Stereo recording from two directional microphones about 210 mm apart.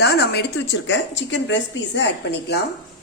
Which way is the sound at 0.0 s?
50° left (ahead or behind).